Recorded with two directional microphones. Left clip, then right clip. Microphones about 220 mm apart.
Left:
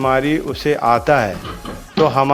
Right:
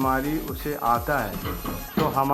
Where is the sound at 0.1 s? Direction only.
40° left (ahead or behind).